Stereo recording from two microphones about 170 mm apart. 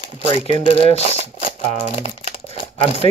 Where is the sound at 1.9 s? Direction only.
35° left (ahead or behind).